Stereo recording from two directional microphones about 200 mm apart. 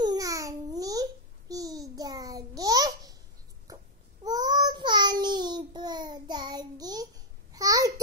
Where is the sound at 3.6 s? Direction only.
20° right (ahead or behind).